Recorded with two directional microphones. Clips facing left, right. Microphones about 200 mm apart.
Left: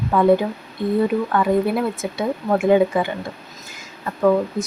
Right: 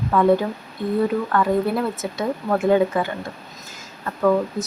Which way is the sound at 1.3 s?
10° left (ahead or behind).